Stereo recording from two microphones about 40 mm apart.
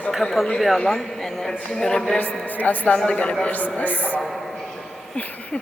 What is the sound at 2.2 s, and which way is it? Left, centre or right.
A woman's voice, left.